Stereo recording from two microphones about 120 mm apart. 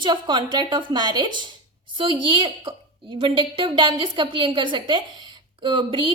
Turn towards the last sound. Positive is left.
turn(degrees=-45)  # may be behind; listen again after turning